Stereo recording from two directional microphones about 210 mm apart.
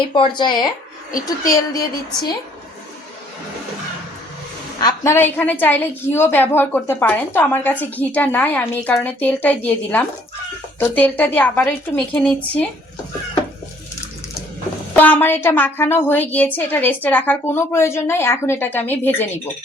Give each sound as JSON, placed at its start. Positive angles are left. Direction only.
{"t": 0.1, "sound": "a woman's voice", "side_deg": 20}
{"t": 4.8, "sound": "a woman's voice", "side_deg": 15}
{"t": 14.9, "sound": "a woman's voice", "side_deg": 10}